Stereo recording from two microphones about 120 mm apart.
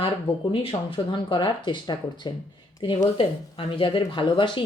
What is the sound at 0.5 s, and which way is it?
A woman's voice, 50° left (ahead or behind).